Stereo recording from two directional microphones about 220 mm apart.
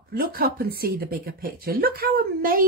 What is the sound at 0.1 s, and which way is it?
Speech, 40° right (ahead or behind).